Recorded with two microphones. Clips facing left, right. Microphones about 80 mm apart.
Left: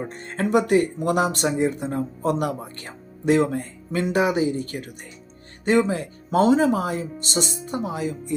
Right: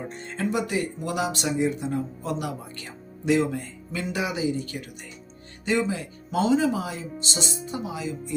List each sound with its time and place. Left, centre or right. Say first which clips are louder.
0.1 s speech: left 7 dB; left